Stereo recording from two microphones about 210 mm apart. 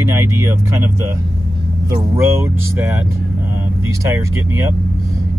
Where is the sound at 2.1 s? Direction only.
15° right (ahead or behind).